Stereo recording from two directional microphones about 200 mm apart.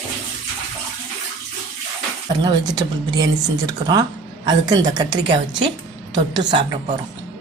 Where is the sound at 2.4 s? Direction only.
20° right (ahead or behind).